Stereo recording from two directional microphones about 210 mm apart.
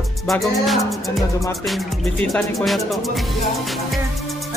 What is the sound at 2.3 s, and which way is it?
Music, centre (ahead or behind).